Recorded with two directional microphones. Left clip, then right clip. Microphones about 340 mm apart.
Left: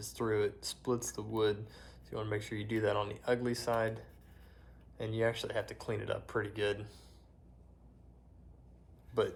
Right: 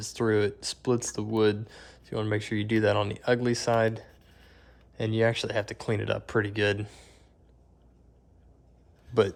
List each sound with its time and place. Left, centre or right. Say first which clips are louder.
0.0 s speech: right 7 dB; right